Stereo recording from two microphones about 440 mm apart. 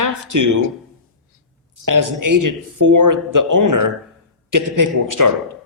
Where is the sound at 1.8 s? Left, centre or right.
Right.